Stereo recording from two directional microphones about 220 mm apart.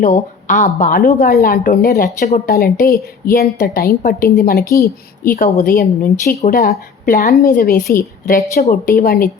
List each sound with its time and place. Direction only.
0.4 s speech: 35° left (ahead or behind)
4.6 s a woman's voice: 15° left (ahead or behind)
5.2 s speech: 35° left (ahead or behind)